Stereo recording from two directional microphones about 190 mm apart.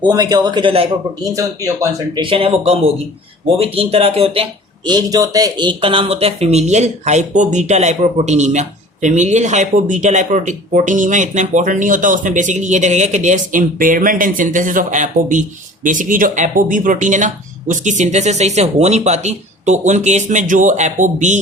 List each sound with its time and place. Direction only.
0.0 s speech: 20° right (ahead or behind)
1.4 s speech: 15° right (ahead or behind)
2.3 s speech: 30° right (ahead or behind)
4.9 s speech: 20° right (ahead or behind); by 21.3 s 40° right (ahead or behind)